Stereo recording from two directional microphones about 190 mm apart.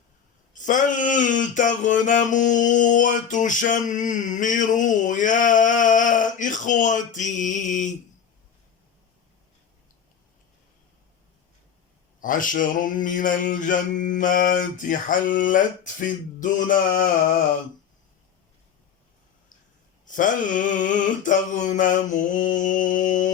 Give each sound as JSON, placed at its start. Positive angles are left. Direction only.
{"t": 0.5, "sound": "a sound", "side_deg": 40}
{"t": 12.2, "sound": "mantra", "side_deg": 45}
{"t": 20.1, "sound": "mantra", "side_deg": 45}